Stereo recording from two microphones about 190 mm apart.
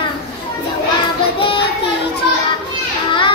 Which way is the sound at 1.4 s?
25° left (ahead or behind).